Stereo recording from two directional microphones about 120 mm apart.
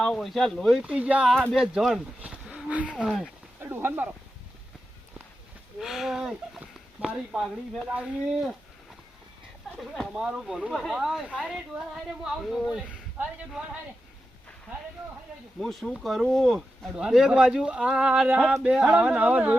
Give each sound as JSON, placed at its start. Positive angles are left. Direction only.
{"t": 0.0, "sound": "speech", "side_deg": 5}
{"t": 3.6, "sound": "speech", "side_deg": -20}
{"t": 5.8, "sound": "speech", "side_deg": -5}
{"t": 9.7, "sound": "speech", "side_deg": 0}
{"t": 15.6, "sound": "speech", "side_deg": 0}